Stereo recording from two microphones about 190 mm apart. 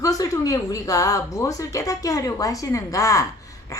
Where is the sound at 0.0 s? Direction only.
20° left (ahead or behind).